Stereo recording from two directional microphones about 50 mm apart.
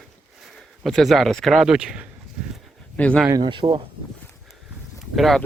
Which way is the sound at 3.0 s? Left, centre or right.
Left.